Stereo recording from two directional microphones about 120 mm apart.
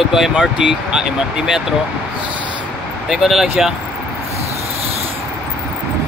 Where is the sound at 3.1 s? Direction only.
5° right (ahead or behind).